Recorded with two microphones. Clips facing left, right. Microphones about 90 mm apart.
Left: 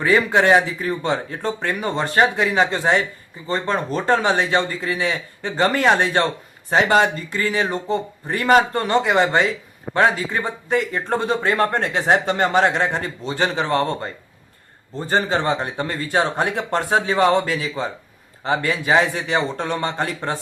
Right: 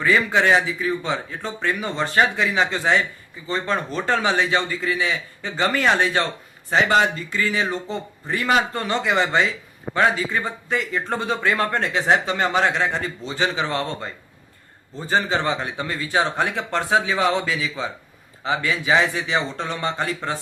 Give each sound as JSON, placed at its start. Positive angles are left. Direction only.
{"t": 0.0, "sound": "speech", "side_deg": 45}